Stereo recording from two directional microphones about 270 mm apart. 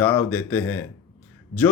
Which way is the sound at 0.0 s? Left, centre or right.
Centre.